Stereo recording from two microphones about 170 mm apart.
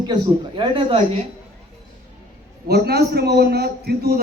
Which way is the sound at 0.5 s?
30° right (ahead or behind).